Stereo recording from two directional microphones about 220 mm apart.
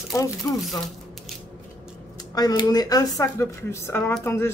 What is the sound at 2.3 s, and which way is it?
Speech, 20° left (ahead or behind).